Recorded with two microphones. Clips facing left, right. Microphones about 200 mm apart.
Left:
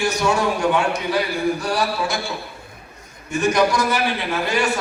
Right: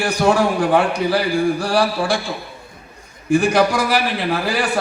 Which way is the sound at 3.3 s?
30° right (ahead or behind).